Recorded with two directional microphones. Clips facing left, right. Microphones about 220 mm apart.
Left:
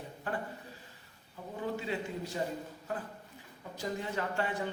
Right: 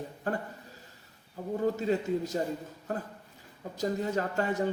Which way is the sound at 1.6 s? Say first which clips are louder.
Right 7 dB; 40° right (ahead or behind).